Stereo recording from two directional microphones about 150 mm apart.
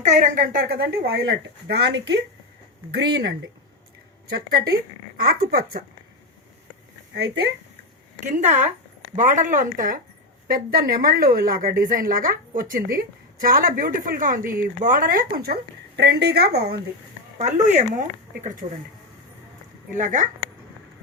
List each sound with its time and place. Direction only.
0.0 s speech: 60° right (ahead or behind); by 3.2 s 90° right
4.3 s speech: 90° right
7.1 s speech: 90° right
8.2 s a woman's voice: 50° right (ahead or behind)
10.5 s a woman's voice: 80° right
16.0 s speech: 90° right
17.3 s speech: 50° right (ahead or behind)
19.9 s a woman's voice: 60° right (ahead or behind)